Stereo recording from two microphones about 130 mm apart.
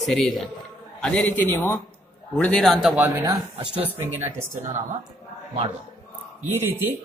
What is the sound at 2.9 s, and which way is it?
Speech, 15° right (ahead or behind).